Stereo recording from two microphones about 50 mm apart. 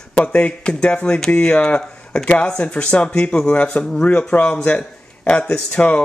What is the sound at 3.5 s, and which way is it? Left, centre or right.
Speech, left.